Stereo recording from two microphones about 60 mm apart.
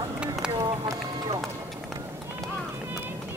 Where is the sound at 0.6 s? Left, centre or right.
Right.